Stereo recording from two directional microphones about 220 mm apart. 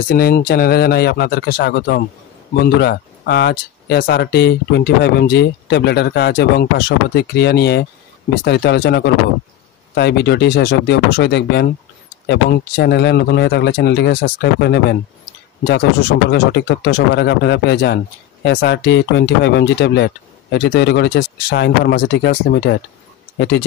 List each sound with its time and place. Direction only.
0.1 s speech: 45° left (ahead or behind)
16.3 s speech: 50° left (ahead or behind)